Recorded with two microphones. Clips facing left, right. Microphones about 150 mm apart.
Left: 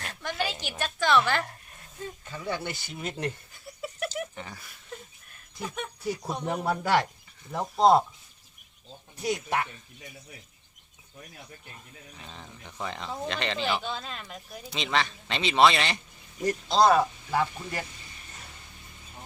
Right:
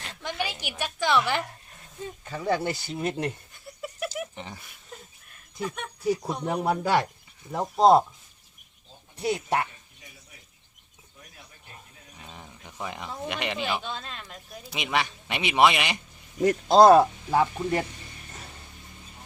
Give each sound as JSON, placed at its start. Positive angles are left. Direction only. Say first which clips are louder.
{"t": 0.1, "sound": "a sound", "louder": "even", "side_deg": -15}
{"t": 2.3, "sound": "speech", "louder": "right 7 dB", "side_deg": -35}
{"t": 3.5, "sound": "a sound", "louder": "even", "side_deg": 5}
{"t": 4.4, "sound": "speech", "louder": "right 1 dB", "side_deg": -20}
{"t": 5.5, "sound": "speech", "louder": "right 2 dB", "side_deg": 5}
{"t": 6.5, "sound": "speech", "louder": "right 2 dB", "side_deg": -15}
{"t": 9.2, "sound": "speech", "louder": "right 2 dB", "side_deg": -30}
{"t": 12.2, "sound": "speech", "louder": "right 1 dB", "side_deg": -15}
{"t": 13.8, "sound": "speech", "louder": "left 1 dB", "side_deg": 0}
{"t": 16.4, "sound": "speech", "louder": "right 6 dB", "side_deg": -60}
{"t": 17.3, "sound": "speech", "louder": "right 5 dB", "side_deg": -20}